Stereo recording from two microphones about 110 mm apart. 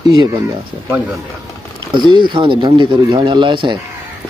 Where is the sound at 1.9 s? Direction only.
45° right (ahead or behind).